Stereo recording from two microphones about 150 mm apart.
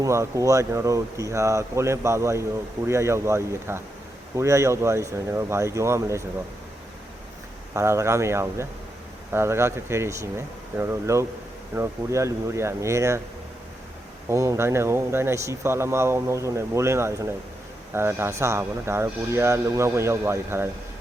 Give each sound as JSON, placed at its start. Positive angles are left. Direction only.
{"t": 0.0, "sound": "speech", "side_deg": -20}
{"t": 7.7, "sound": "speech", "side_deg": -20}
{"t": 14.3, "sound": "speech", "side_deg": -20}